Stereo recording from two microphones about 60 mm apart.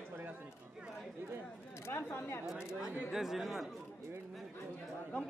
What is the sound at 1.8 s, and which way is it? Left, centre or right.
Speech, left.